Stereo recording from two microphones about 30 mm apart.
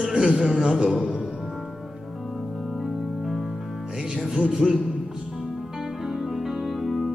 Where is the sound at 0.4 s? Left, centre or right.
Centre.